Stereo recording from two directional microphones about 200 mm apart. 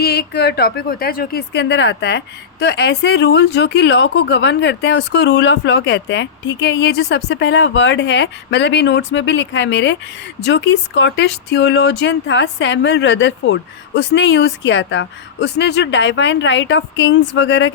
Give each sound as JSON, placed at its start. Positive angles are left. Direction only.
{"t": 0.0, "sound": "speech", "side_deg": 55}